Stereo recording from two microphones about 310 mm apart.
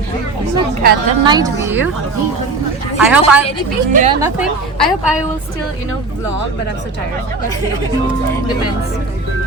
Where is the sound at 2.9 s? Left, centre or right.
Centre.